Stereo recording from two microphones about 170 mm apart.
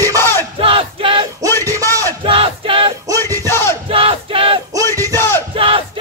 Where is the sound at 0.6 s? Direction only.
30° right (ahead or behind).